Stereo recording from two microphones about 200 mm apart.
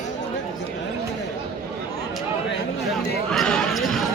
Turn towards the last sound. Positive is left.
turn(degrees=0)  # may be behind; listen again after turning